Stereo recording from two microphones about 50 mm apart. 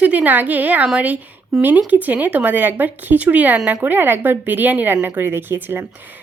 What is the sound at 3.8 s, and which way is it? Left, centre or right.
Speech, right.